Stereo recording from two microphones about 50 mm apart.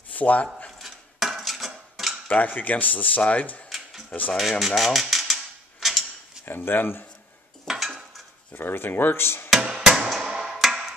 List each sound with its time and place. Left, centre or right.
0.1 s speech: left
0.7 s dishes: centre
2.2 s speech: left
4.4 s a sound: centre
6.4 s speech: left
7.6 s dishes: centre
8.5 s speech: left
9.5 s music: centre
10.2 s a sound: centre